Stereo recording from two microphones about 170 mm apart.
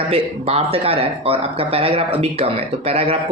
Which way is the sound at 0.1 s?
35° right (ahead or behind).